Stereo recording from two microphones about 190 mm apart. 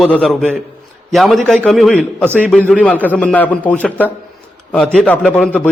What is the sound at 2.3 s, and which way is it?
Speech, 10° right (ahead or behind).